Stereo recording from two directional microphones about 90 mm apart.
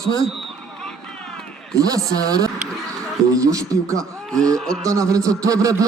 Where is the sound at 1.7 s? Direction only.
40° right (ahead or behind).